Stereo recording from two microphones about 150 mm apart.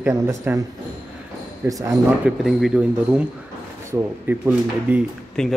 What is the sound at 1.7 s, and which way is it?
Speech, 25° right (ahead or behind).